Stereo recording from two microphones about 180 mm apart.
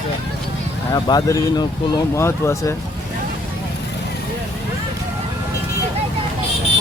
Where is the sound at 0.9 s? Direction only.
20° left (ahead or behind).